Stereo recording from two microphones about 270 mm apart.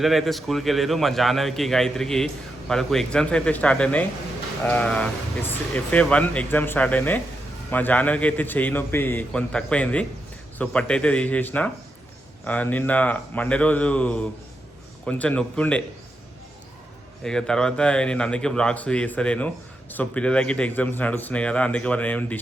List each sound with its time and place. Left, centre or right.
0.0 s a man's voice: centre
17.2 s a man's voice: centre